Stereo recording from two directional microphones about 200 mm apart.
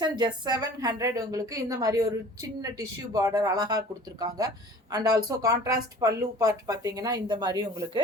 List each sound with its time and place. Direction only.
0.0 s a woman's voice: 20° right (ahead or behind)